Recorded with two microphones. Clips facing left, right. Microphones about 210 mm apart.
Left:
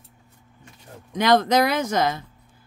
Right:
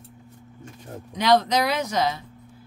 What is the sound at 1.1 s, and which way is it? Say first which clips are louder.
Speech: left 2 dB; 50° left (ahead or behind).